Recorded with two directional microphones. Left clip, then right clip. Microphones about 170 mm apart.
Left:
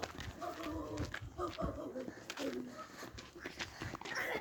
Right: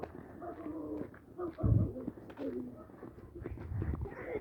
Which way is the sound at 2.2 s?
50° right (ahead or behind).